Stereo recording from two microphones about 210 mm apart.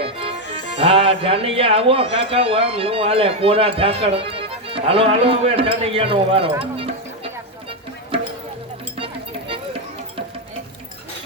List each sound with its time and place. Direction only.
0.0 s music: 25° right (ahead or behind)
0.8 s speech: 25° right (ahead or behind)